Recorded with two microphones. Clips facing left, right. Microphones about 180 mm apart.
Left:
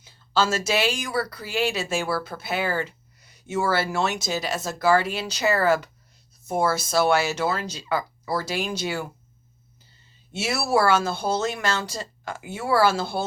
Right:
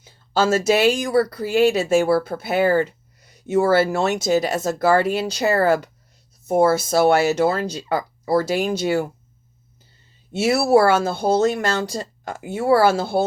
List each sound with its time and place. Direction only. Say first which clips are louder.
0.0 s speech: right 4 dB; 50° right (ahead or behind)
10.3 s speech: right 7 dB; 55° right (ahead or behind)